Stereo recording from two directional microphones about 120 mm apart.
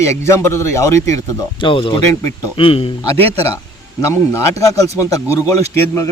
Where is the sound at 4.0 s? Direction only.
25° left (ahead or behind).